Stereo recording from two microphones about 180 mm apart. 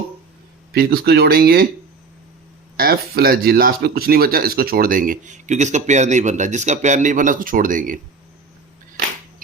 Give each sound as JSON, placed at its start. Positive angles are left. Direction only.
{"t": 0.7, "sound": "speech", "side_deg": -60}
{"t": 2.7, "sound": "speech", "side_deg": -55}